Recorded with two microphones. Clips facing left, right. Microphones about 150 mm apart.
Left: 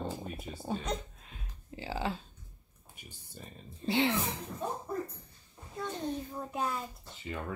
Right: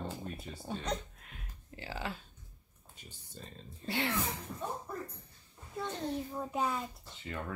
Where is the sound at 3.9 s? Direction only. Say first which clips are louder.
Left 6 dB; 20° left (ahead or behind).